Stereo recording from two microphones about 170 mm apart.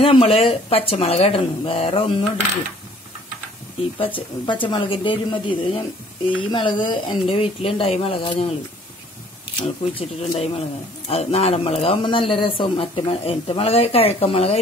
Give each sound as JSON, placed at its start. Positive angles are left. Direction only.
{"t": 0.0, "sound": "speech", "side_deg": 35}
{"t": 4.0, "sound": "a woman's voice", "side_deg": 30}
{"t": 9.6, "sound": "speech", "side_deg": 30}